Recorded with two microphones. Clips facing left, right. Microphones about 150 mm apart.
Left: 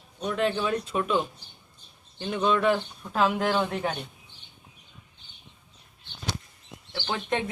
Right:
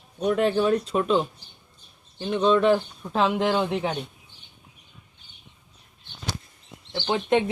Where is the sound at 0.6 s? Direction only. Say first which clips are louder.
Right 5 dB; 30° right (ahead or behind).